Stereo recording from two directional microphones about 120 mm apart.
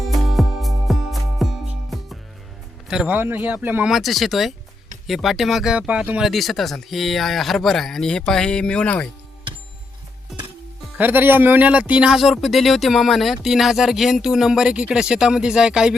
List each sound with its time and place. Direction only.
0.0 s music: centre (ahead or behind)
2.9 s speech: 5° right (ahead or behind)
3.8 s speech: centre (ahead or behind)
10.9 s speech: 15° right (ahead or behind)